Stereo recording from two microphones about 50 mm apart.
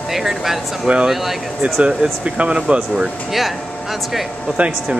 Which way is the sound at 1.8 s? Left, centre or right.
Right.